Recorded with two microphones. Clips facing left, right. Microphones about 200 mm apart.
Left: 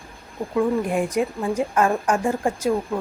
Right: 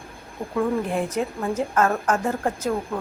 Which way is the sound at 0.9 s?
10° left (ahead or behind).